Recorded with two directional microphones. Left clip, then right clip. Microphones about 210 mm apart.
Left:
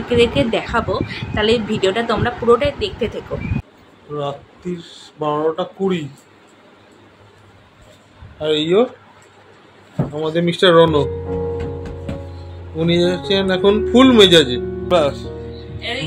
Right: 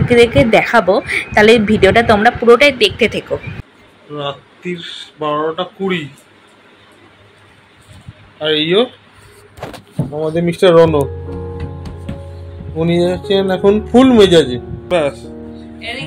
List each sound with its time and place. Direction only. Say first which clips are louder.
0.2 s a woman's voice: right 7 dB; 25° right (ahead or behind)
4.2 s speech: right 2 dB; 5° right (ahead or behind)
8.4 s speech: right 2 dB; 5° left (ahead or behind)
10.2 s speech: right 3 dB; 10° right (ahead or behind)
12.7 s speech: right 2 dB; 5° right (ahead or behind)